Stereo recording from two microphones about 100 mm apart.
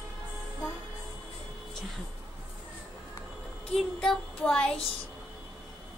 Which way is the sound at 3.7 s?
10° left (ahead or behind).